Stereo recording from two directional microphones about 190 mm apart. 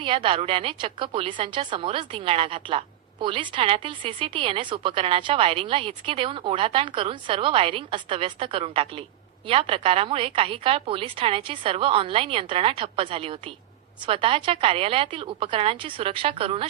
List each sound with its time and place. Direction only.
0.0 s a woman's voice: 25° right (ahead or behind)